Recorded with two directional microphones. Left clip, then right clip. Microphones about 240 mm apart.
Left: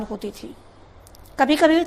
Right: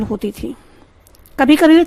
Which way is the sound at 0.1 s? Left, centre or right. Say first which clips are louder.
Right 9 dB; right.